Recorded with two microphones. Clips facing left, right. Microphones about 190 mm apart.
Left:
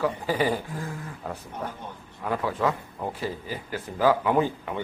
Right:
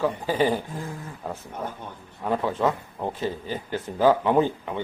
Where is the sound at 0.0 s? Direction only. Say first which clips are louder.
Right 2 dB; 20° right (ahead or behind).